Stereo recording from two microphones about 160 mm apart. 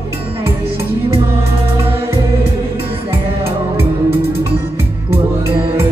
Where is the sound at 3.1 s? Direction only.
35° right (ahead or behind).